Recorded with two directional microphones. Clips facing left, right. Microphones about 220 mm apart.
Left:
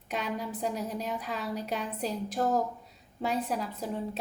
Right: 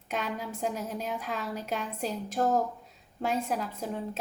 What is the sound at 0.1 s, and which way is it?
A woman's voice, centre (ahead or behind).